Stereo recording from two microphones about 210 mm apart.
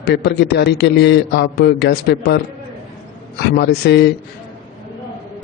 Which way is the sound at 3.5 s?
50° left (ahead or behind).